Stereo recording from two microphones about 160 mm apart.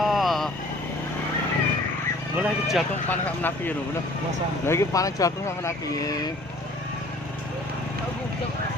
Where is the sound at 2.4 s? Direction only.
Centre (ahead or behind).